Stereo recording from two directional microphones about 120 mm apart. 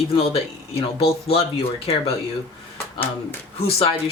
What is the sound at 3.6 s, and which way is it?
Speech, 55° left (ahead or behind).